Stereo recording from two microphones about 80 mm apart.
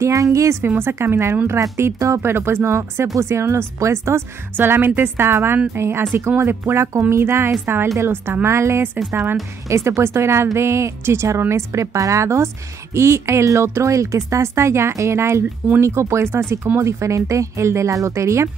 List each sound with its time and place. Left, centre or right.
0.0 s a woman's voice: right